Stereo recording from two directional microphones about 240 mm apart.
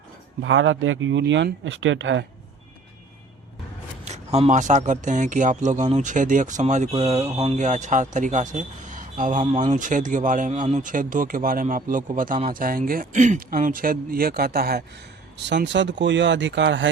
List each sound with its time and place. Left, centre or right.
0.4 s speech: right
4.0 s a man's voice: right